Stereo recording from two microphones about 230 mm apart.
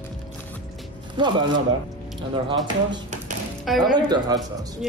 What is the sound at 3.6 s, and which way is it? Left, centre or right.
Speech, centre.